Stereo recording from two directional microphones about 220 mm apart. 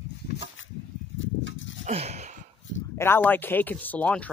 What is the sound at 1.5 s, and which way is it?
Goat, 60° left (ahead or behind).